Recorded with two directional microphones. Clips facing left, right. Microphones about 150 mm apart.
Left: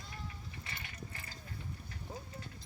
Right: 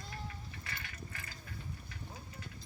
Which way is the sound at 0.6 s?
20° left (ahead or behind).